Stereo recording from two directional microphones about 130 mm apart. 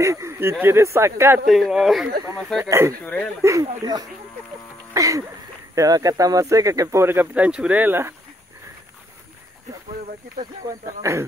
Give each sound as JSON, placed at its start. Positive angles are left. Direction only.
{"t": 0.0, "sound": "speech", "side_deg": -25}
{"t": 1.5, "sound": "speech", "side_deg": 0}
{"t": 2.6, "sound": "speech", "side_deg": -20}
{"t": 4.9, "sound": "a sound", "side_deg": -25}
{"t": 5.8, "sound": "speech", "side_deg": -25}
{"t": 10.9, "sound": "speech", "side_deg": -25}